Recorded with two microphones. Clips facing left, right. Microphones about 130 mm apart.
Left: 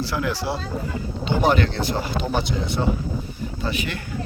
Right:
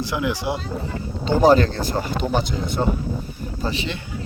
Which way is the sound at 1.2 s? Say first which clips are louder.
Right 5 dB; 40° right (ahead or behind).